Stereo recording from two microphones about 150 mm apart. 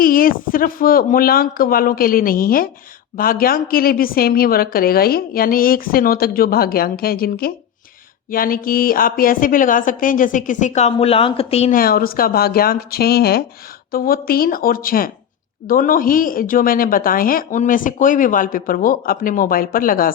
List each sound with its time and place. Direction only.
0.0 s a woman's voice: 70° left (ahead or behind)
8.3 s a woman's voice: 70° left (ahead or behind); by 11.7 s 40° left (ahead or behind)
11.7 s a woman's voice: 80° left
13.9 s a woman's voice: 80° left